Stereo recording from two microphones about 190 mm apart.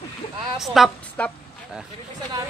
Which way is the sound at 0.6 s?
Centre (ahead or behind).